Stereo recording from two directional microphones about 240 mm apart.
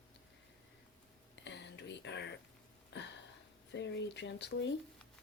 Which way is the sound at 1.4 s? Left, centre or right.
Left.